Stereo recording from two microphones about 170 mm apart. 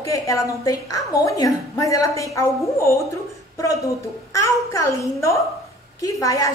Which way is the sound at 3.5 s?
20° left (ahead or behind).